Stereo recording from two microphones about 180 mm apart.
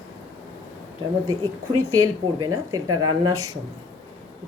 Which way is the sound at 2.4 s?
20° right (ahead or behind).